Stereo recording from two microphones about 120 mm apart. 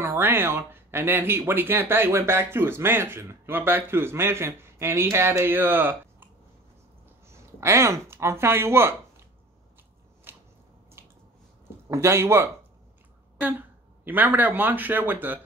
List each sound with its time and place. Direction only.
0.0 s speech: 20° right (ahead or behind)
7.2 s speech: 25° right (ahead or behind)
10.3 s a sound: 20° right (ahead or behind)
11.0 s squish: 20° right (ahead or behind)
11.9 s speech: 20° right (ahead or behind)